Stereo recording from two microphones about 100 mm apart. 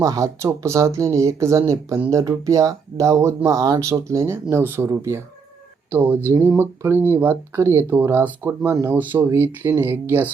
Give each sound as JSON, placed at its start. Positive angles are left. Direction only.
{"t": 0.0, "sound": "speech", "side_deg": -35}
{"t": 3.9, "sound": "speech", "side_deg": -25}